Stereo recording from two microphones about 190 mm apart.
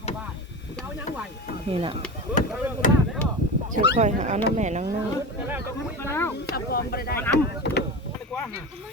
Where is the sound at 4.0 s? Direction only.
40° right (ahead or behind).